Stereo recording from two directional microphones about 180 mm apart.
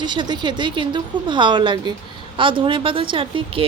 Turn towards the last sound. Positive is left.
turn(degrees=-30)  # may be behind; listen again after turning